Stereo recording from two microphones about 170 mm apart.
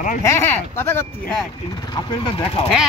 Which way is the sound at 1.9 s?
30° left (ahead or behind).